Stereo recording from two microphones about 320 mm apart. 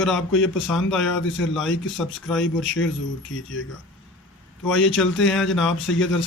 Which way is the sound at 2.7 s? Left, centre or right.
Left.